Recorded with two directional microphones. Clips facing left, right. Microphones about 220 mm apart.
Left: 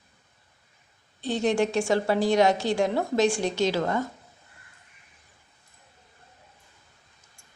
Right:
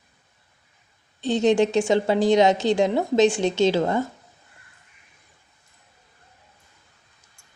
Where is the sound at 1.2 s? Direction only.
20° right (ahead or behind).